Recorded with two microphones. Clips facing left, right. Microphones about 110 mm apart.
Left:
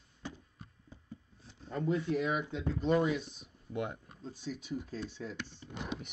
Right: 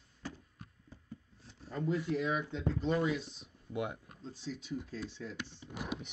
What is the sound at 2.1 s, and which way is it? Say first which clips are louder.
Speech: left 1 dB; 15° left (ahead or behind).